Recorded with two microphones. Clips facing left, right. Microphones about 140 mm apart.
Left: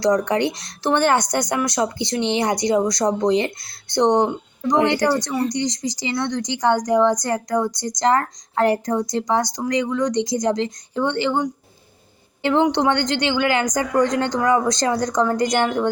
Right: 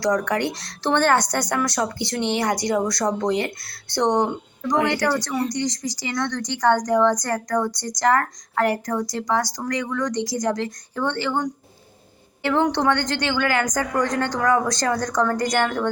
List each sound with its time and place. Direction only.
0.0 s a woman's voice: 20° left (ahead or behind)